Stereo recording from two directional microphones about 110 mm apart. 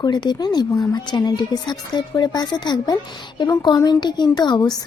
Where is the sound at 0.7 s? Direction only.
30° left (ahead or behind).